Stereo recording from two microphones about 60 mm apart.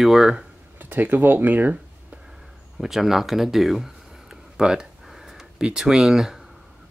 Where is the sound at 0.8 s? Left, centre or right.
Right.